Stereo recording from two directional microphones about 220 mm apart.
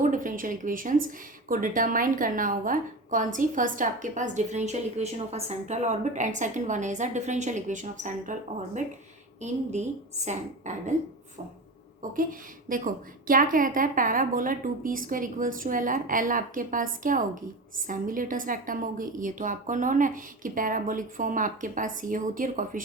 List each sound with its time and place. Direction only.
0.0 s a woman's voice: 35° right (ahead or behind)
12.1 s a woman's voice: 40° right (ahead or behind)